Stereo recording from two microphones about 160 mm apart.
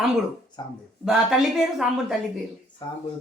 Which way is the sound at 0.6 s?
25° left (ahead or behind).